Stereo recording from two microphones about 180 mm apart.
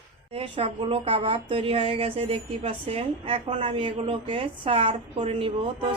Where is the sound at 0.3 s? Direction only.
30° right (ahead or behind).